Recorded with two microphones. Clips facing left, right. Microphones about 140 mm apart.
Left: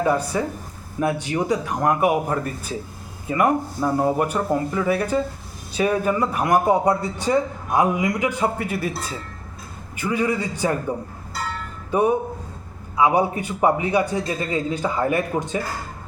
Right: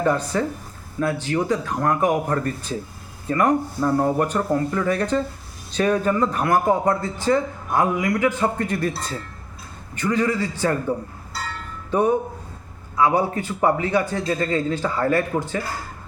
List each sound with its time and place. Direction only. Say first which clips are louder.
0.0 s a man's voice: even; 10° left (ahead or behind)
9.9 s a man's voice: right 1 dB; 10° left (ahead or behind)
11.9 s a man's voice: even; 10° left (ahead or behind)